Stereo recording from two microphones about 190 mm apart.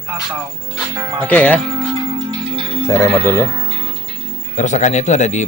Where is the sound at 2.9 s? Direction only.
15° left (ahead or behind).